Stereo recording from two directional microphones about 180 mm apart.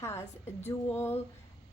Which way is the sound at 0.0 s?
15° left (ahead or behind).